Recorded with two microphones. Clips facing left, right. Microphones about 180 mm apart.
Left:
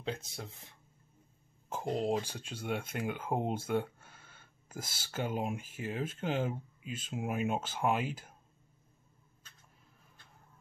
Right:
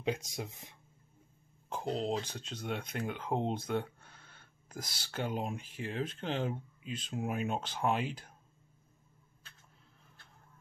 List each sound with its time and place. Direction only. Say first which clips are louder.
0.0 s speech: right 4 dB; 15° right (ahead or behind)
1.7 s speech: left 2 dB; 10° left (ahead or behind)